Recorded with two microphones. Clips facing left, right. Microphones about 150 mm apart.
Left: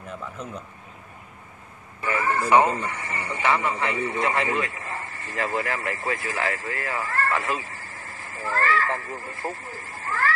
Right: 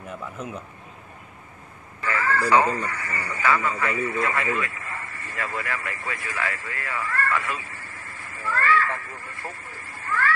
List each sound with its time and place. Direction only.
0.2 s speech: 10° right (ahead or behind)
2.0 s speech: 20° left (ahead or behind); by 10.3 s 35° left (ahead or behind)